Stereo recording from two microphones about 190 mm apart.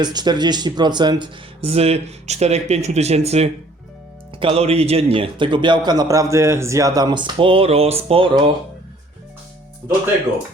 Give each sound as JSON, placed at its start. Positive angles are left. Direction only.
{"t": 0.0, "sound": "speech", "side_deg": -20}